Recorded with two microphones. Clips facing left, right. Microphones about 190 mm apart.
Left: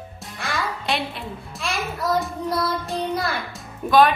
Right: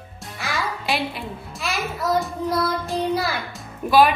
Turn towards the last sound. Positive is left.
turn(degrees=-5)  # may be behind; listen again after turning